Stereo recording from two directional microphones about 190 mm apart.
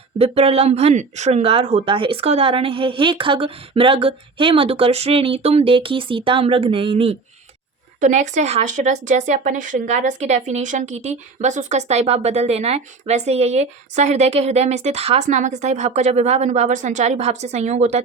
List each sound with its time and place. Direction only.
0.2 s speech: 30° right (ahead or behind)
8.0 s speech: 40° right (ahead or behind)